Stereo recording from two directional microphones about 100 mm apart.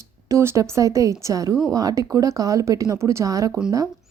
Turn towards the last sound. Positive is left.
turn(degrees=-35)  # may be behind; listen again after turning